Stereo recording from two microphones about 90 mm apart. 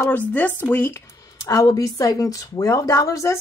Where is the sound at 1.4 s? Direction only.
40° left (ahead or behind).